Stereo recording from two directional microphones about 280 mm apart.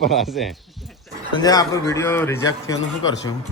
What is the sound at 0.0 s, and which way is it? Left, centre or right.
Speech, centre.